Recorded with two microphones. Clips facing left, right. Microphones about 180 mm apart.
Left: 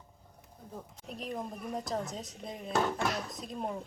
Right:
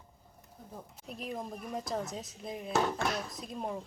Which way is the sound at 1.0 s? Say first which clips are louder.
Left 1 dB; centre (ahead or behind).